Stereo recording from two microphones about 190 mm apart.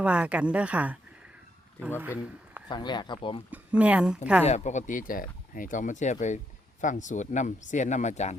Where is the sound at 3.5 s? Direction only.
5° right (ahead or behind).